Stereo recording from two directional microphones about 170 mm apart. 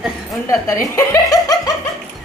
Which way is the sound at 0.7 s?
15° left (ahead or behind).